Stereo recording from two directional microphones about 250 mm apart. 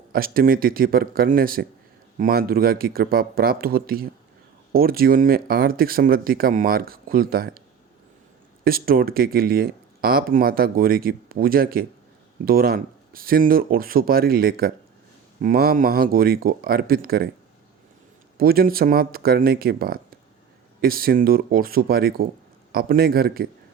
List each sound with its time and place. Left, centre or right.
0.1 s speech: right
8.6 s speech: right
18.3 s speech: right